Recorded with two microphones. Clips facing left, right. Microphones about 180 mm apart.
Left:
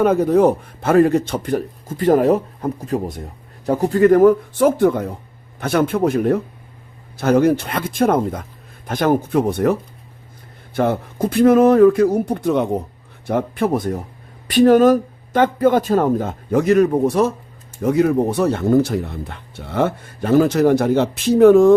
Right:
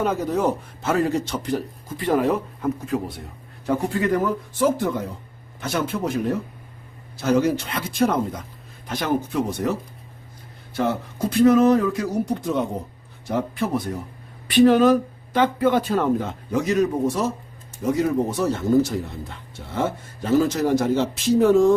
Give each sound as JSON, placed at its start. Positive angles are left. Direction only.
{"t": 0.0, "sound": "speech", "side_deg": 55}
{"t": 10.8, "sound": "speech", "side_deg": 55}